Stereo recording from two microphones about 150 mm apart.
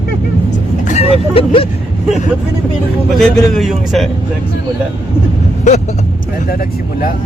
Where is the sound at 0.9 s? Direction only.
40° left (ahead or behind).